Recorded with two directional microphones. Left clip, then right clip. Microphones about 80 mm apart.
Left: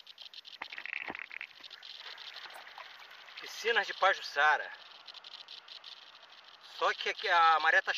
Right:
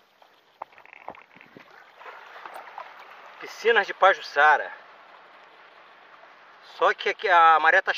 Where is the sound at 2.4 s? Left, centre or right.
Left.